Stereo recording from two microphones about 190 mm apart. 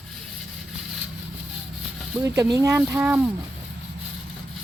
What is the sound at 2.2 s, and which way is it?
Speech, 15° right (ahead or behind).